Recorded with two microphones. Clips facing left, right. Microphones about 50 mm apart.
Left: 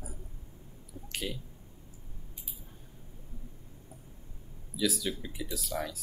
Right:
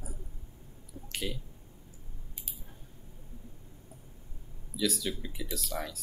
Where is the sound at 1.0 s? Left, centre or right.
Centre.